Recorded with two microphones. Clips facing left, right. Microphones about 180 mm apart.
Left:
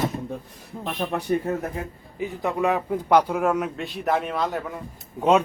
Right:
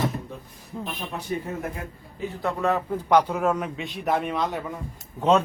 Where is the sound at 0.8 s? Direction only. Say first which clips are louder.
Left 7 dB; 70° left (ahead or behind).